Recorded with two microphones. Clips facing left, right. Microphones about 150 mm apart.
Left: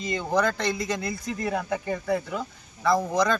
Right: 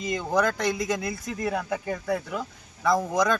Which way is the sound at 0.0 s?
Centre (ahead or behind).